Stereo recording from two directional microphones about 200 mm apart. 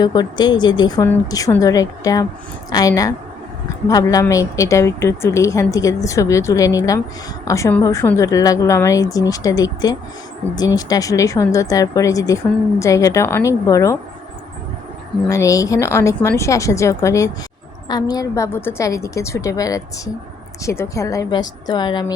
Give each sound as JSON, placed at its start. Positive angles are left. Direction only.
{"t": 0.0, "sound": "speech", "side_deg": 20}
{"t": 15.3, "sound": "speech", "side_deg": 15}